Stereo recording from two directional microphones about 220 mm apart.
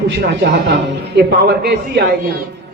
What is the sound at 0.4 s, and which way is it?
A man's voice, 50° right (ahead or behind).